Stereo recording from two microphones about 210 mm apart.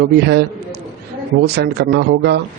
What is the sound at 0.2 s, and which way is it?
Speech, 55° right (ahead or behind).